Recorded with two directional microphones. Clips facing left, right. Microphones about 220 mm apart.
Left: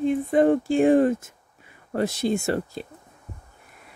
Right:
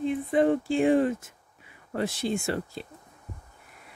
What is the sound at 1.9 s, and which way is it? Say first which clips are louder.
Speech: left 5 dB; 40° left (ahead or behind).